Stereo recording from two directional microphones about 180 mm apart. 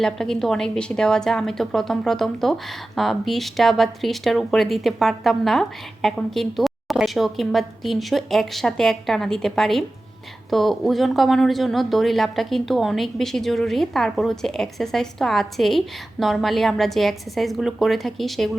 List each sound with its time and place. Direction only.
0.0 s a woman's voice: 5° left (ahead or behind)